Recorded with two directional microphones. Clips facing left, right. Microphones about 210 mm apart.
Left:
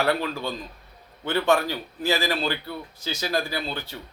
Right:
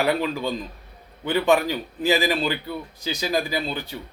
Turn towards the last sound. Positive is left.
turn(degrees=-15)  # may be behind; listen again after turning